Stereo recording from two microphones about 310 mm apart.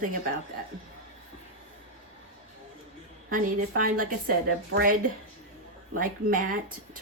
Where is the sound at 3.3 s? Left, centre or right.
Right.